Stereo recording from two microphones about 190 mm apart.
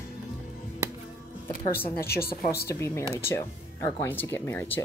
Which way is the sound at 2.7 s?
15° left (ahead or behind).